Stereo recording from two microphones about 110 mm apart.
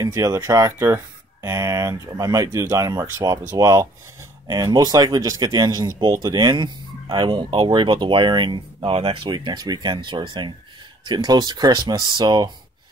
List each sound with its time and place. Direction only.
0.0 s speech: 30° right (ahead or behind); by 9.3 s 55° right (ahead or behind)
9.3 s speech: 40° right (ahead or behind)